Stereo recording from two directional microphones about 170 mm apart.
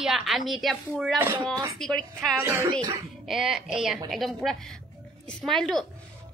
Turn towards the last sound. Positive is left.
turn(degrees=0)  # may be behind; listen again after turning